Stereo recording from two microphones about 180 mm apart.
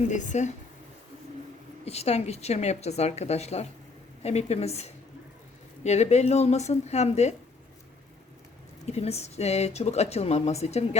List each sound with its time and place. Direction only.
0.1 s speech: 45° left (ahead or behind)
1.8 s speech: 35° left (ahead or behind)
8.9 s speech: 35° left (ahead or behind)